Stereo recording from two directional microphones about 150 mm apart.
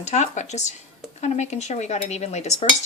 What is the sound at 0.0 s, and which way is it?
Speech, 50° left (ahead or behind).